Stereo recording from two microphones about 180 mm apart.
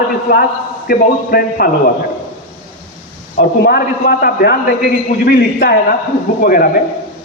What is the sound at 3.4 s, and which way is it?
A man's voice, 65° left (ahead or behind).